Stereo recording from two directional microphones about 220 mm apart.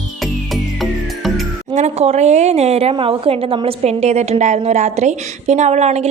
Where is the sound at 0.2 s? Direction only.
Centre (ahead or behind).